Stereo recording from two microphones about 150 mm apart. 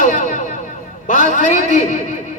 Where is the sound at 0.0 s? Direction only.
55° left (ahead or behind).